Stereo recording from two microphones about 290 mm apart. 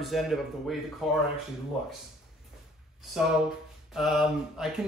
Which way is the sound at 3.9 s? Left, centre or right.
Centre.